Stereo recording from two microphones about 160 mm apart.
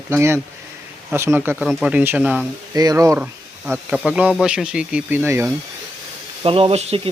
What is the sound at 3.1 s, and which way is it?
Speech, 5° right (ahead or behind).